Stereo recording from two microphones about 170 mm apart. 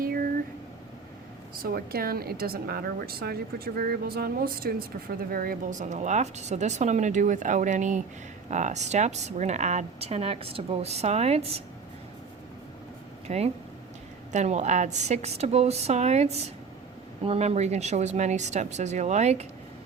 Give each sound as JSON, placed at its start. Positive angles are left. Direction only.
{"t": 0.0, "sound": "a sound", "side_deg": -60}
{"t": 1.6, "sound": "speech", "side_deg": -60}
{"t": 13.2, "sound": "speech", "side_deg": -40}